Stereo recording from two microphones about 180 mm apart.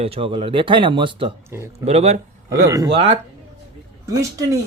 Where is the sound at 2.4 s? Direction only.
15° right (ahead or behind).